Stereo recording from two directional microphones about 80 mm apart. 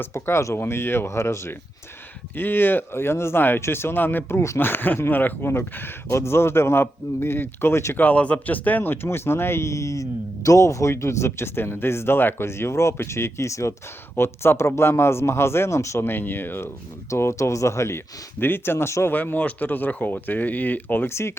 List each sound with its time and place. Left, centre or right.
0.0 s speech: left
2.3 s speech: left
17.1 s speech: left
19.1 s speech: left